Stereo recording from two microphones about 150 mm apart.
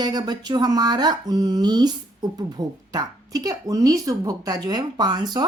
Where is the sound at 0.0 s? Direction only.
25° right (ahead or behind).